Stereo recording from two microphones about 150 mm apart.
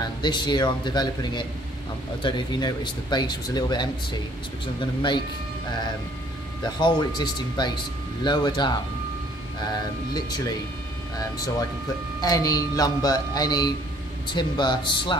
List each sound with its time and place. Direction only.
0.0 s speech: 30° left (ahead or behind)
6.6 s speech: 30° left (ahead or behind)